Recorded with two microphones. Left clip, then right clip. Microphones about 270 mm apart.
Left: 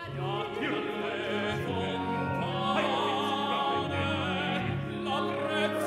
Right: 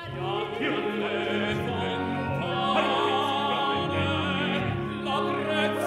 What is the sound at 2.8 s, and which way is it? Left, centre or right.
Music, centre.